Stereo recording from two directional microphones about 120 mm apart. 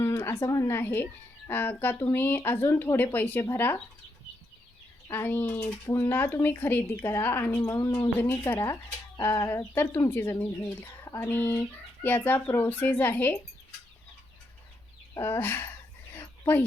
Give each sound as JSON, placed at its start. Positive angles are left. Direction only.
{"t": 0.0, "sound": "speech", "side_deg": 20}
{"t": 5.1, "sound": "speech", "side_deg": 15}
{"t": 7.6, "sound": "speech", "side_deg": 30}
{"t": 8.2, "sound": "speech", "side_deg": 15}
{"t": 15.2, "sound": "speech", "side_deg": 20}
{"t": 16.1, "sound": "a sound", "side_deg": 15}